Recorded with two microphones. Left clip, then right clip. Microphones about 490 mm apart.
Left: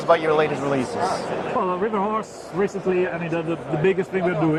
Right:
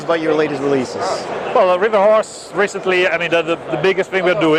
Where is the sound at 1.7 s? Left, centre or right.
Right.